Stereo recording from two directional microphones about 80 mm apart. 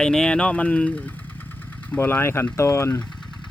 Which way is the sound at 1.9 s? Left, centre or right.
Left.